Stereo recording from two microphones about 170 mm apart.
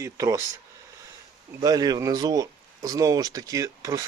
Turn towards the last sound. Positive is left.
turn(degrees=-20)  # may be behind; listen again after turning